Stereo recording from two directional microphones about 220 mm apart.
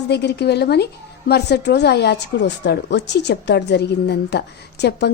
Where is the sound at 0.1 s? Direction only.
50° left (ahead or behind).